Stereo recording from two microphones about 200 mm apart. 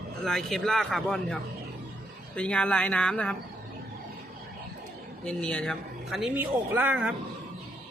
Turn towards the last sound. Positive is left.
turn(degrees=-10)  # may be behind; listen again after turning